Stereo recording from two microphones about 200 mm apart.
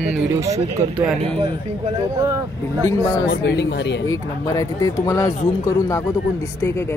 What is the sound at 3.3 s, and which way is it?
Speech, 60° left (ahead or behind).